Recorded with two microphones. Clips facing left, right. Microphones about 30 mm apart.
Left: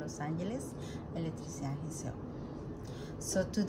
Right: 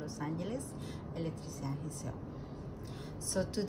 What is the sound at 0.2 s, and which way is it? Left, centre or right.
Speech, right.